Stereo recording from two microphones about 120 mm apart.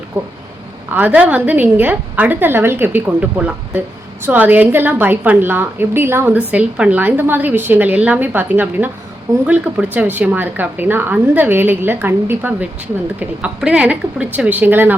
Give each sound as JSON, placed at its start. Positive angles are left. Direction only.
{"t": 0.9, "sound": "speech", "side_deg": -15}